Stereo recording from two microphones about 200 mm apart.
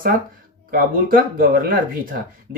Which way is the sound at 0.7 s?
45° right (ahead or behind).